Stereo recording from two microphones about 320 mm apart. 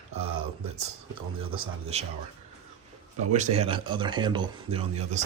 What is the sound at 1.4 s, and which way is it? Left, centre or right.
Speech, centre.